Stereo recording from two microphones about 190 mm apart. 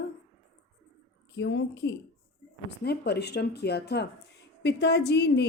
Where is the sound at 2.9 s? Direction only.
60° left (ahead or behind).